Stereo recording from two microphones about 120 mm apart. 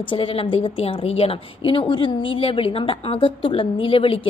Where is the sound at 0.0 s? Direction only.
45° left (ahead or behind).